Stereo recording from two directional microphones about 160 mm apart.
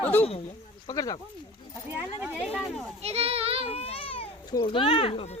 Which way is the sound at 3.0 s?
40° right (ahead or behind).